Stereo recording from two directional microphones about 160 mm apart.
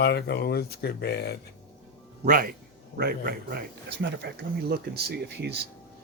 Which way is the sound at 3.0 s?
75° right (ahead or behind).